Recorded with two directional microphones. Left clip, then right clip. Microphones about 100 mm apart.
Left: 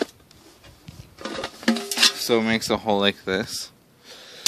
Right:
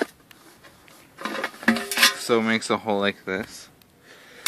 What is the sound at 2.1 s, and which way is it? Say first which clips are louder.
Speech: even; 40° left (ahead or behind).